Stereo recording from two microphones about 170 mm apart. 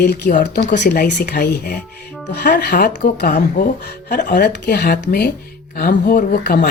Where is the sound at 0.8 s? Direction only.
60° left (ahead or behind).